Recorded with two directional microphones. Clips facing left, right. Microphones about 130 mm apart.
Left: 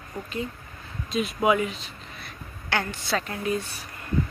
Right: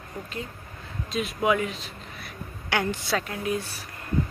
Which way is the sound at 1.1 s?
Centre (ahead or behind).